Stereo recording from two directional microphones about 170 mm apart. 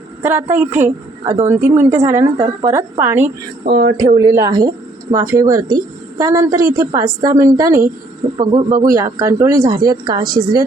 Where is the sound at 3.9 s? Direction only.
45° right (ahead or behind).